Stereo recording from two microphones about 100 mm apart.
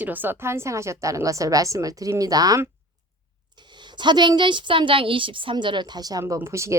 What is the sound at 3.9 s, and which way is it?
A woman's voice, 50° right (ahead or behind).